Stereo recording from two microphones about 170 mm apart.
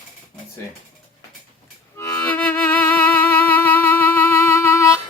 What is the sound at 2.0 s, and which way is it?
Music, 15° left (ahead or behind).